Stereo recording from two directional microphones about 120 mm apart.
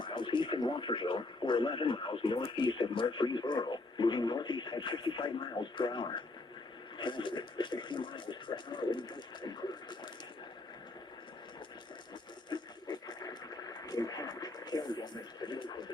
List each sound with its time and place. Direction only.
0.0 s speech: 45° left (ahead or behind)
12.5 s radio: 35° left (ahead or behind)